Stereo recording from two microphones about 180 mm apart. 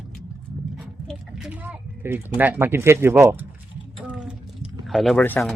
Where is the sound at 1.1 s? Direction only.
5° right (ahead or behind).